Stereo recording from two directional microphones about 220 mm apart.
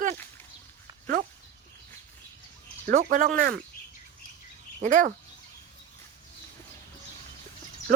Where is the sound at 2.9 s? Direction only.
35° right (ahead or behind).